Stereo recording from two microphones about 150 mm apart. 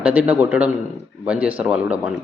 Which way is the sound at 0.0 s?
10° right (ahead or behind).